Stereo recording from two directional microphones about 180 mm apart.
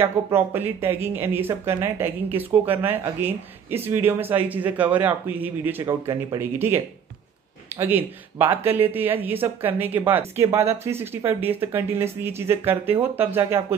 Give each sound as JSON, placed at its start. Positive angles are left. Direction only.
{"t": 0.0, "sound": "speech", "side_deg": -10}